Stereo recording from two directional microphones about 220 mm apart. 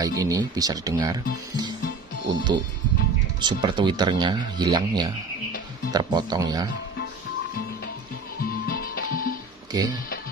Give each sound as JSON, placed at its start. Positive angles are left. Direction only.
{"t": 0.0, "sound": "speech", "side_deg": -15}
{"t": 2.2, "sound": "speech", "side_deg": -20}
{"t": 8.6, "sound": "music", "side_deg": 40}
{"t": 9.7, "sound": "speech", "side_deg": -15}